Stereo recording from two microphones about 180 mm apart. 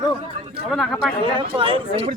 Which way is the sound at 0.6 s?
Centre (ahead or behind).